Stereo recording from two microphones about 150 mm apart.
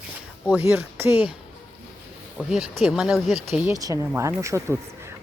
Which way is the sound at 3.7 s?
20° right (ahead or behind).